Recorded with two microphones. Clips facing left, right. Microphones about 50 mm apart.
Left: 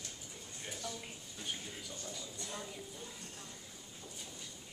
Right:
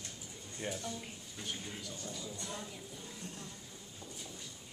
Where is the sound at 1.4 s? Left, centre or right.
Centre.